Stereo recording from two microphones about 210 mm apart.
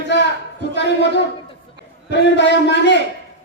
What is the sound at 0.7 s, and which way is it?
Speech, 55° left (ahead or behind).